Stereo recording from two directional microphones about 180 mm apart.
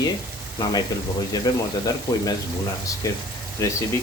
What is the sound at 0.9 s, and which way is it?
Speech, 20° left (ahead or behind).